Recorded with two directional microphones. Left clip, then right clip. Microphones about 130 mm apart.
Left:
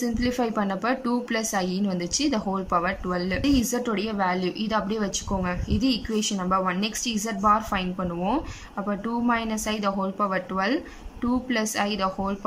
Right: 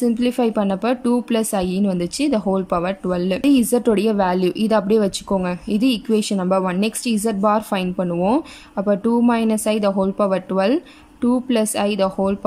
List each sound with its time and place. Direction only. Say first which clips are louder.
0.0 s a woman's voice: right 7 dB; 35° right (ahead or behind)